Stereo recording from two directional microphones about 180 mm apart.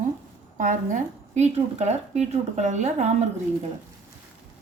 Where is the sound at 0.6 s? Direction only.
45° right (ahead or behind).